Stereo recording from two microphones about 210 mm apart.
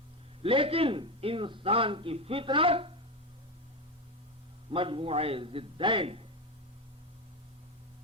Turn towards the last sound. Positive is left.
turn(degrees=-25)  # may be behind; listen again after turning